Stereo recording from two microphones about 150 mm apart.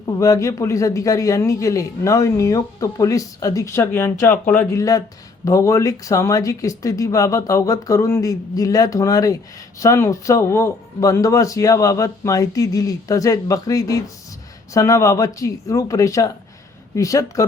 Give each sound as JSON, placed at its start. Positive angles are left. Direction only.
{"t": 0.2, "sound": "a man's voice", "side_deg": 20}
{"t": 4.8, "sound": "a man's voice", "side_deg": 25}